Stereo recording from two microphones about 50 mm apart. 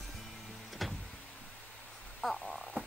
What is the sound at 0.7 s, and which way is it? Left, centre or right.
Power windows, centre.